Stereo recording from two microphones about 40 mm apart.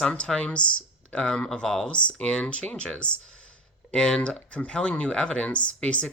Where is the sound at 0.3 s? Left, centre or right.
Left.